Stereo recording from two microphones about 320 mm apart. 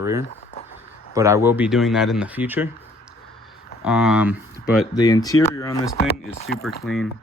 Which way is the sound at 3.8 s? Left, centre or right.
Centre.